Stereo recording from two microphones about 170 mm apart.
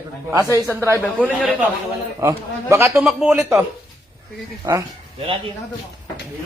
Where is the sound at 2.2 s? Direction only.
15° right (ahead or behind).